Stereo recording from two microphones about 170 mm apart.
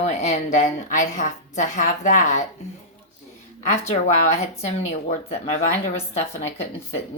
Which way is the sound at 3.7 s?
40° left (ahead or behind).